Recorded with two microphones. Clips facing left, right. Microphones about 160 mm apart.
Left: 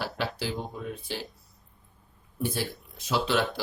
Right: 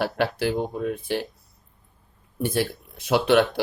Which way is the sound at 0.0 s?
60° right (ahead or behind).